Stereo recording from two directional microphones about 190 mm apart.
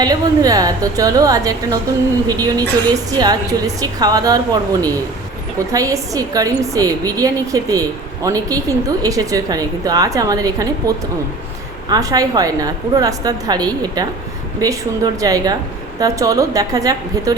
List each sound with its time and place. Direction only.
0.0 s a woman's voice: 20° right (ahead or behind)